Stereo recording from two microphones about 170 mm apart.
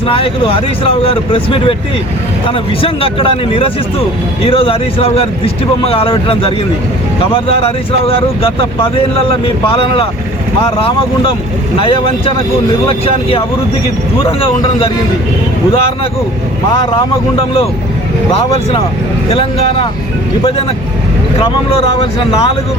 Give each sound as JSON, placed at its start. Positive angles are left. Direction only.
{"t": 0.1, "sound": "speech", "side_deg": 30}
{"t": 19.3, "sound": "speech", "side_deg": 30}